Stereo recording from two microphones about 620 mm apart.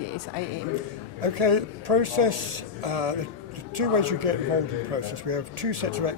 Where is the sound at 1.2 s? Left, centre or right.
Right.